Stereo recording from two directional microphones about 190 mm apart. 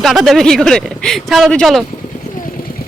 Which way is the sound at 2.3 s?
45° left (ahead or behind).